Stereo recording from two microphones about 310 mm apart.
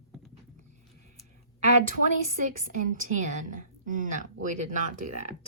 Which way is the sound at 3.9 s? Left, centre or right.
Right.